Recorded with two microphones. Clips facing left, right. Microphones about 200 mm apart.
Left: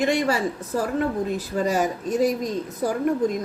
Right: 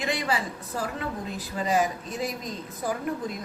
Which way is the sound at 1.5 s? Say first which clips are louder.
Left 2 dB; 45° left (ahead or behind).